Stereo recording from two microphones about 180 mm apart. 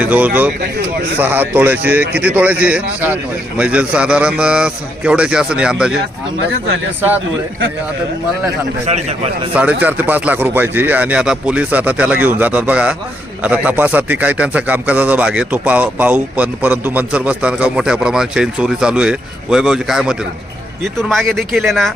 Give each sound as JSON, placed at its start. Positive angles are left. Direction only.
{"t": 0.0, "sound": "a man's voice", "side_deg": -10}
{"t": 8.9, "sound": "a man's voice", "side_deg": -35}
{"t": 9.8, "sound": "a man's voice", "side_deg": -10}